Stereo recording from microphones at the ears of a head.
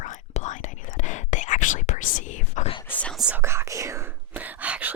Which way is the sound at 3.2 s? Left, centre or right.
Right.